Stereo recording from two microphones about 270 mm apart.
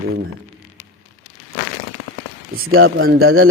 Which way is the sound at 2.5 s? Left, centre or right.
Right.